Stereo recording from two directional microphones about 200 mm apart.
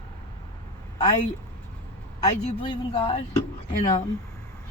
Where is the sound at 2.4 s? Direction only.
30° left (ahead or behind).